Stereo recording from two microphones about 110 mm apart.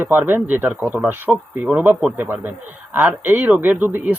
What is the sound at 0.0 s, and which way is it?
Speech, 20° right (ahead or behind).